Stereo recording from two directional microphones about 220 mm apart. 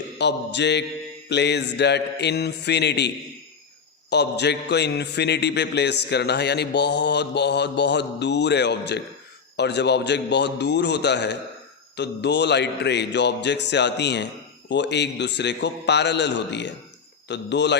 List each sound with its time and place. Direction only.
0.2 s a man's voice: 50° left (ahead or behind)
4.1 s a man's voice: 50° left (ahead or behind)